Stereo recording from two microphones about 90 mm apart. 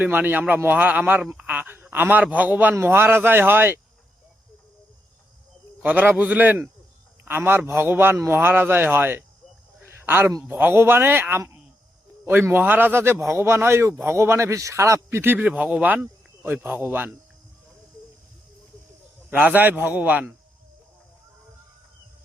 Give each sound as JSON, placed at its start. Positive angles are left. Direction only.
{"t": 0.0, "sound": "a man's voice", "side_deg": -20}
{"t": 5.8, "sound": "a man's voice", "side_deg": -20}
{"t": 9.8, "sound": "a sound", "side_deg": -25}
{"t": 10.5, "sound": "a man's voice", "side_deg": -25}
{"t": 15.2, "sound": "a man's voice", "side_deg": -20}
{"t": 19.3, "sound": "a man's voice", "side_deg": -15}